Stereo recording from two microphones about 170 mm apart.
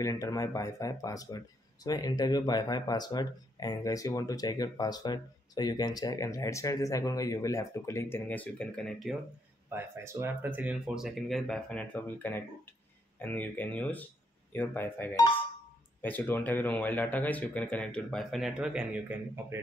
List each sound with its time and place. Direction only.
0.0 s speech: 20° left (ahead or behind); by 9.1 s 5° left (ahead or behind)
9.7 s speech: 15° right (ahead or behind)